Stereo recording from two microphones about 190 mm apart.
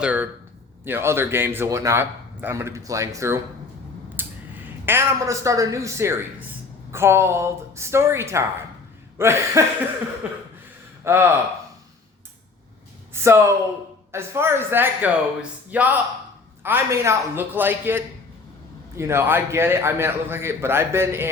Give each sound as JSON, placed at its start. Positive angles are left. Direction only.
{"t": 0.0, "sound": "a man's voice", "side_deg": -10}
{"t": 11.0, "sound": "a man's voice", "side_deg": -10}
{"t": 13.2, "sound": "a man's voice", "side_deg": -15}